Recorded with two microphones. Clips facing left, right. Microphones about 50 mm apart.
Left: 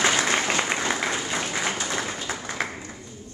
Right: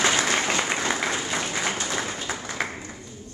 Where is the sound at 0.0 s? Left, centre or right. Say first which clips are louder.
Even; centre.